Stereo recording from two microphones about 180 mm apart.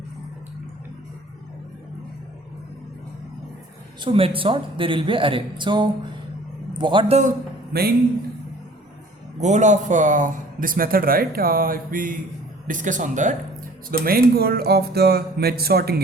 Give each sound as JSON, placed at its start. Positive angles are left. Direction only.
{"t": 4.0, "sound": "a man's voice", "side_deg": -30}
{"t": 7.7, "sound": "speech", "side_deg": -60}
{"t": 9.4, "sound": "speech", "side_deg": -40}
{"t": 13.9, "sound": "speech", "side_deg": -55}